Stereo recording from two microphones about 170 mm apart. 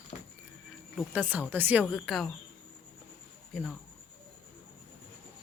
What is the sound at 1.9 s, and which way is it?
Speech, centre (ahead or behind).